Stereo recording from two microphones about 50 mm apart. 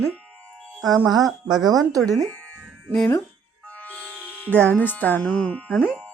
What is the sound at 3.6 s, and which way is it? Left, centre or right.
Music, left.